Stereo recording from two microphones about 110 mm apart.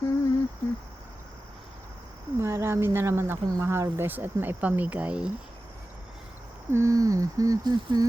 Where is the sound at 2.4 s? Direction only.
25° right (ahead or behind).